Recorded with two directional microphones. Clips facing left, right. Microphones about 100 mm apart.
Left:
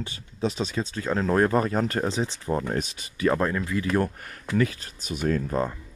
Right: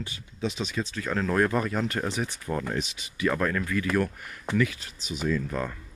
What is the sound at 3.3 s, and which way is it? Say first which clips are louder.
Speech: left 2 dB; 25° left (ahead or behind).